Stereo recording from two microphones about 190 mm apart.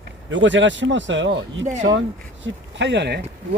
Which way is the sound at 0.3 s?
75° right (ahead or behind).